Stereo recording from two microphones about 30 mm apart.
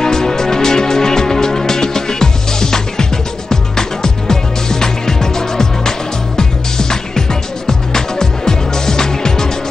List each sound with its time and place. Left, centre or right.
0.0 s music: centre